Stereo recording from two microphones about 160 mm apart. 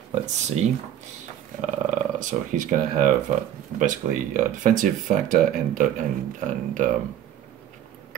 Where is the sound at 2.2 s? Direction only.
55° right (ahead or behind).